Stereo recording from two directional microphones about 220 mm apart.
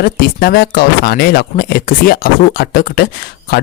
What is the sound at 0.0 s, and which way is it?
Speech, 40° left (ahead or behind).